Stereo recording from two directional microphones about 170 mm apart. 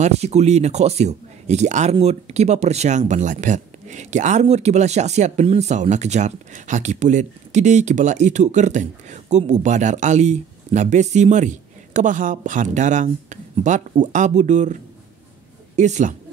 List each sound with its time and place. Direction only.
0.0 s speech: 40° right (ahead or behind)